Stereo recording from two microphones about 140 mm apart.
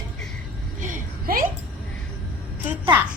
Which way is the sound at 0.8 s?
80° right.